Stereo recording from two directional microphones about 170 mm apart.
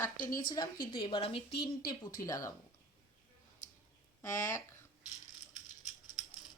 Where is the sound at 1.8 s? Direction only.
20° left (ahead or behind).